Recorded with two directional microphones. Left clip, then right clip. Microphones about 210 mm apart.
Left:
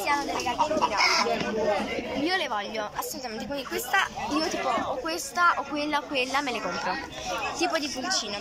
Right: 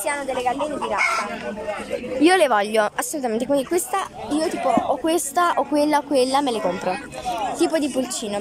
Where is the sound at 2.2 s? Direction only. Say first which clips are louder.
Right 13 dB; 60° right (ahead or behind).